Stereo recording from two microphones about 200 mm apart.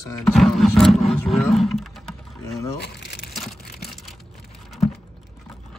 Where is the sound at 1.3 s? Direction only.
Centre (ahead or behind).